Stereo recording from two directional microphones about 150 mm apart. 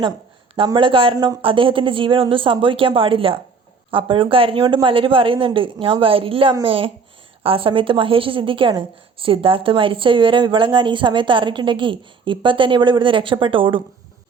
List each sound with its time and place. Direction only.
0.7 s a woman's voice: 35° right (ahead or behind)